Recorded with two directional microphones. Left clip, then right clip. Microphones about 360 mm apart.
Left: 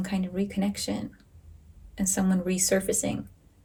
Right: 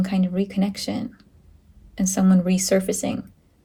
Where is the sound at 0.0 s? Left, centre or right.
Centre.